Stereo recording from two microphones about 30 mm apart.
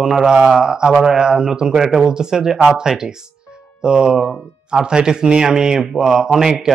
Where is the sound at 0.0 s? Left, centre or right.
Centre.